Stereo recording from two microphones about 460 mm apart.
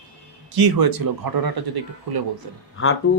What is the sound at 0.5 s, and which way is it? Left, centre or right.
Speech, right.